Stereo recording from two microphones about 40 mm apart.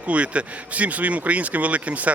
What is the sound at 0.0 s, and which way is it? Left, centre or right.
Speech, right.